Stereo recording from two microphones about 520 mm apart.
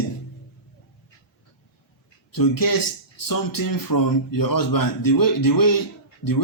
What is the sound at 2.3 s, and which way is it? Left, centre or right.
A man's voice, left.